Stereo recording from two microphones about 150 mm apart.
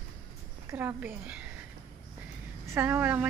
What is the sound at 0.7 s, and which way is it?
Speech, 15° right (ahead or behind).